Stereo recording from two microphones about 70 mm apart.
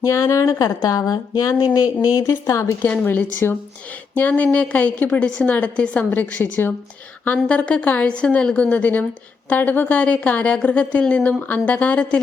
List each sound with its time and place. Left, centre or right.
0.0 s speech: left
2.1 s speech: left
2.8 s a woman's voice: left
6.1 s a woman's voice: left
7.4 s a woman's voice: centre